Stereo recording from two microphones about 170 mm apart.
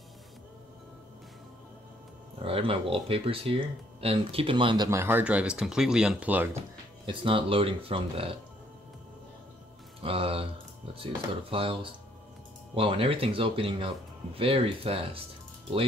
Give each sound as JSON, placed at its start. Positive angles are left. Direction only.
{"t": 2.3, "sound": "speech", "side_deg": -35}
{"t": 7.1, "sound": "speech", "side_deg": -30}
{"t": 10.0, "sound": "speech", "side_deg": -35}
{"t": 11.5, "sound": "speech", "side_deg": -30}